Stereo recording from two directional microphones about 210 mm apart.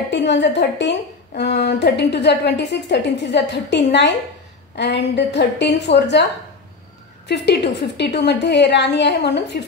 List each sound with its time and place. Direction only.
0.1 s a woman's voice: 55° left (ahead or behind)
7.2 s a woman's voice: 55° left (ahead or behind)